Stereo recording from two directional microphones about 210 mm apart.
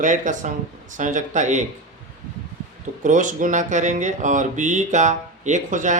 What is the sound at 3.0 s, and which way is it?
Speech, 35° right (ahead or behind).